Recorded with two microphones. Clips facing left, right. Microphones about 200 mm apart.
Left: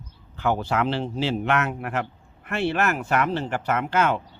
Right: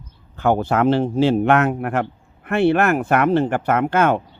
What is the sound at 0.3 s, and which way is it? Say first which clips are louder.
Speech: right 6 dB; 50° right (ahead or behind).